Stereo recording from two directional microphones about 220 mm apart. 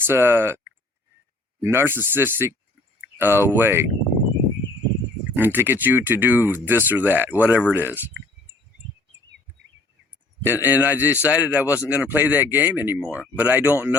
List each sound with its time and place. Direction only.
0.0 s speech: 10° right (ahead or behind)
1.6 s speech: 10° right (ahead or behind)
5.4 s speech: 10° right (ahead or behind)
10.4 s speech: 10° right (ahead or behind)